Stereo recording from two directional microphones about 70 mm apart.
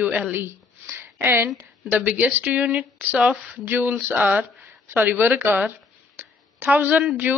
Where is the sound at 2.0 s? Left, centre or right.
Right.